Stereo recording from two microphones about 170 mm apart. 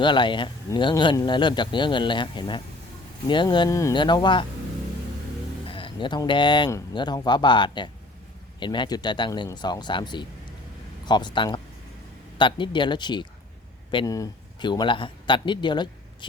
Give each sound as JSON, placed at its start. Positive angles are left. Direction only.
{"t": 0.0, "sound": "a man's voice", "side_deg": 30}
{"t": 5.6, "sound": "a man's voice", "side_deg": 30}